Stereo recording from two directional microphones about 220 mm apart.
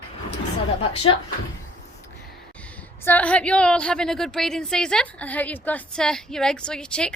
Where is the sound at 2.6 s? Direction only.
5° left (ahead or behind).